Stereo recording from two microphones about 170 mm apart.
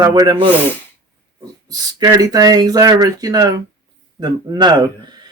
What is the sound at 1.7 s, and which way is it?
Speech, 20° right (ahead or behind).